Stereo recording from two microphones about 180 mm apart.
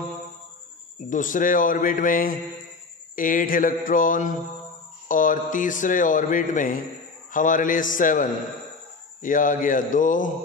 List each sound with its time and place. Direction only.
1.1 s a man's voice: 45° left (ahead or behind)